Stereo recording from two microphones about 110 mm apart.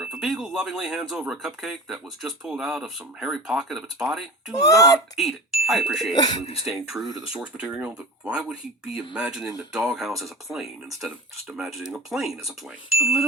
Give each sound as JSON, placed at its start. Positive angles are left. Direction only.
{"t": 0.0, "sound": "speech", "side_deg": -5}
{"t": 4.6, "sound": "a child's voice", "side_deg": 30}
{"t": 5.1, "sound": "speech", "side_deg": 0}
{"t": 6.4, "sound": "speech", "side_deg": 65}
{"t": 6.7, "sound": "speech", "side_deg": 0}